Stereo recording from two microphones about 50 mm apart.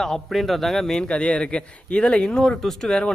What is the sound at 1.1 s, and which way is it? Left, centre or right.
A man's voice, left.